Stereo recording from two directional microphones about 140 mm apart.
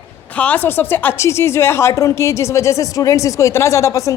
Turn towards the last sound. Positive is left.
turn(degrees=20)  # may be behind; listen again after turning